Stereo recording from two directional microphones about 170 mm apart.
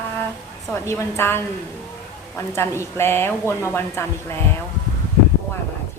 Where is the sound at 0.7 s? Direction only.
15° left (ahead or behind).